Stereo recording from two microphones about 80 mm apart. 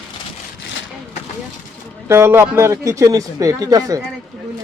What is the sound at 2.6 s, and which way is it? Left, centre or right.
Speech, right.